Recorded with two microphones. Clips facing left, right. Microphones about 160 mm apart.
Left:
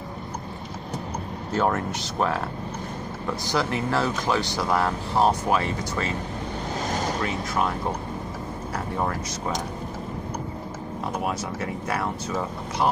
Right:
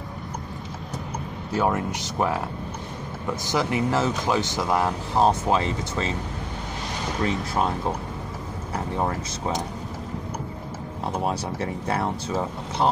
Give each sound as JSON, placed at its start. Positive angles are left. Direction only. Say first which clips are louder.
{"t": 1.5, "sound": "speech", "louder": "even", "side_deg": -10}
{"t": 3.5, "sound": "speech", "louder": "right 2 dB", "side_deg": -20}
{"t": 11.2, "sound": "speech", "louder": "right 2 dB", "side_deg": -30}